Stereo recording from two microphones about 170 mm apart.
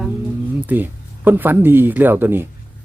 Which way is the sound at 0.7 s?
10° right (ahead or behind).